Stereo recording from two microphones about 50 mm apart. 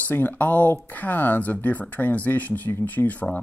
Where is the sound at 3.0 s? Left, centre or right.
Left.